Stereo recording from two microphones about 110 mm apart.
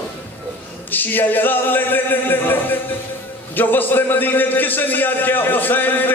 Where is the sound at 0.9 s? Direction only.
15° left (ahead or behind).